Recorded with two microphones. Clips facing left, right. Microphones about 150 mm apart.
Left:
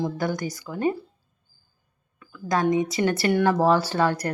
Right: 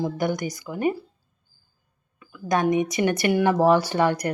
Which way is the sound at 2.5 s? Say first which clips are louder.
Right 1 dB; 20° right (ahead or behind).